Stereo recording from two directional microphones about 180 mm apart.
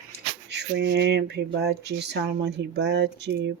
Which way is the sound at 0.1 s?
70° right (ahead or behind).